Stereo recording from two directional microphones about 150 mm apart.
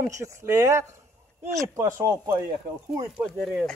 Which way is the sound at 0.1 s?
20° right (ahead or behind).